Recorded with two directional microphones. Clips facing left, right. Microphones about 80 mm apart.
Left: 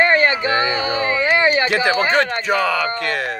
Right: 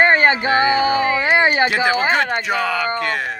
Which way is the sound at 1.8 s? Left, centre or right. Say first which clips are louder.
Even; right.